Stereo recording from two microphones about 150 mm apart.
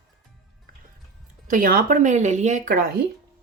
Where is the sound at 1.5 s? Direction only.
70° right (ahead or behind); by 2.6 s 50° right (ahead or behind).